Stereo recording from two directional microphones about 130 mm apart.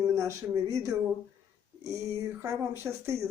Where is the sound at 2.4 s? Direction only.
20° right (ahead or behind).